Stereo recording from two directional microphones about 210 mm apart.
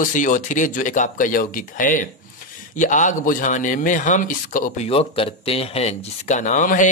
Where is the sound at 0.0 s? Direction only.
40° left (ahead or behind).